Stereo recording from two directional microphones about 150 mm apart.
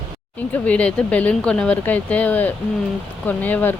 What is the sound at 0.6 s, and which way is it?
Speech, 10° left (ahead or behind).